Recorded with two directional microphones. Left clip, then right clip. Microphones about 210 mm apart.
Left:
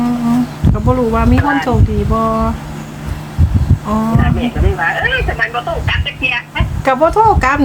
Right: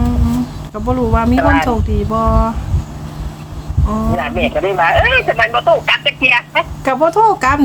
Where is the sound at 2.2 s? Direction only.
10° right (ahead or behind).